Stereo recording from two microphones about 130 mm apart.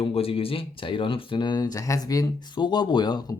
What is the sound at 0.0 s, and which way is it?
Speech, 45° left (ahead or behind).